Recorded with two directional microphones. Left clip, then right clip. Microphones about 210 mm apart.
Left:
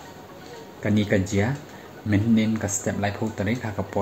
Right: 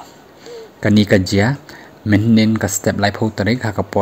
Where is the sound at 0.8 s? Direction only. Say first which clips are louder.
Right 9 dB; 45° right (ahead or behind).